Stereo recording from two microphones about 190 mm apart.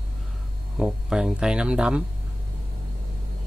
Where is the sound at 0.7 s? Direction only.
5° right (ahead or behind).